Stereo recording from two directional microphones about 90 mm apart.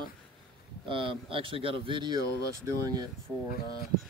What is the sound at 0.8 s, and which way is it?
Speech, 70° right (ahead or behind).